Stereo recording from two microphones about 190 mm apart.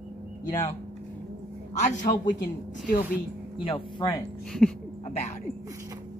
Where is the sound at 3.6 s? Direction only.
25° left (ahead or behind).